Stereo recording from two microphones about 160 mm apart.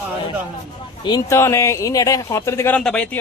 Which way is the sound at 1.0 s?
25° left (ahead or behind).